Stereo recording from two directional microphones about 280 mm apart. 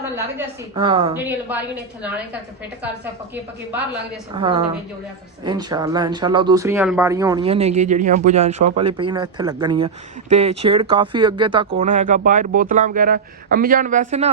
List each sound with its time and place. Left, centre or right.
0.0 s a woman's voice: centre
0.9 s speech: centre
1.1 s a woman's voice: centre
4.4 s speech: centre